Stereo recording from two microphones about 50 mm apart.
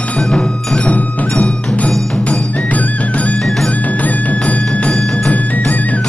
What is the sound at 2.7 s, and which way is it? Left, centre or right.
Music, left.